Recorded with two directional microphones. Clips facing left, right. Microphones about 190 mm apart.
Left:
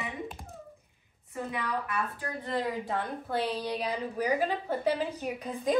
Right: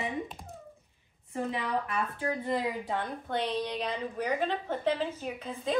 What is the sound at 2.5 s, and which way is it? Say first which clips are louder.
A woman's voice: left 3 dB; centre (ahead or behind).